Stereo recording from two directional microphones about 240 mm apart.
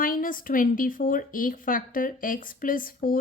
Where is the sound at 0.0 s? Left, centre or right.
Left.